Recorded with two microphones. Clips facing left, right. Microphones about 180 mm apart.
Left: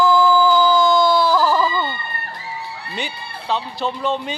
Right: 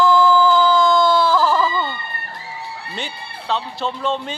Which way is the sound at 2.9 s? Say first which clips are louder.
Left 4 dB; 5° left (ahead or behind).